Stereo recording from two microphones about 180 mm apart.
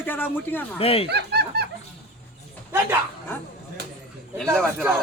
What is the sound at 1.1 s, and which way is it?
Snicker, 65° right (ahead or behind).